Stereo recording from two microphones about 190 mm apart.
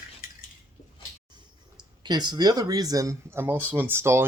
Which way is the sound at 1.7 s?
25° right (ahead or behind).